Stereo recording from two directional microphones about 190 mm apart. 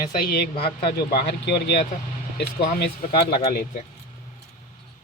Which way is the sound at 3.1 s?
55° left (ahead or behind).